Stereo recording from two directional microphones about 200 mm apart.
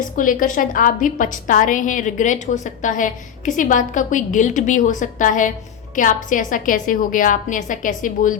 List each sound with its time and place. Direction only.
0.2 s a woman's voice: 40° left (ahead or behind)